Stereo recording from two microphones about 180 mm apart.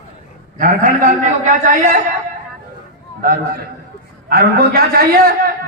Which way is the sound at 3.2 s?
55° right (ahead or behind).